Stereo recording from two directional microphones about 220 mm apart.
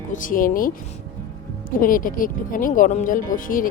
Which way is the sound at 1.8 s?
40° left (ahead or behind).